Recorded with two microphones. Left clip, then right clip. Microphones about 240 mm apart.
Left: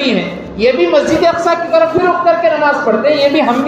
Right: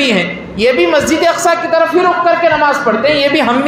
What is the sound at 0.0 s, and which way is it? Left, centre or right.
A woman's voice, right.